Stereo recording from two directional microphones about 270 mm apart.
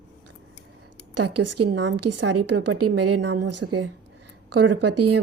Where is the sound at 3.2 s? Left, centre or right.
Right.